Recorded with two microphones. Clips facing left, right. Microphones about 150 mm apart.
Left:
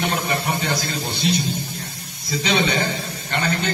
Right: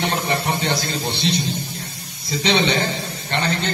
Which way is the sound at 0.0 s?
25° right (ahead or behind).